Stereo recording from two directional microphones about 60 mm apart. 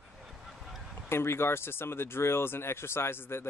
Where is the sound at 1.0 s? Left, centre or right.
Left.